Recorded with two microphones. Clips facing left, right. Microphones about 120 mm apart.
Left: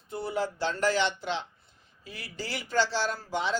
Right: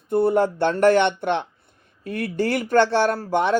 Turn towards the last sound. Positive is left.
turn(degrees=-60)  # may be behind; listen again after turning